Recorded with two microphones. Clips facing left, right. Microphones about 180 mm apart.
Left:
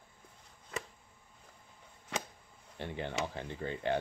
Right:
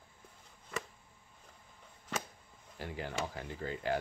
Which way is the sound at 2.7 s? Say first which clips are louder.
Left 2 dB; 25° left (ahead or behind).